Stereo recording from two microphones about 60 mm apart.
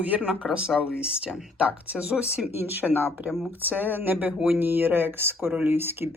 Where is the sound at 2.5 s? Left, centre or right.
Right.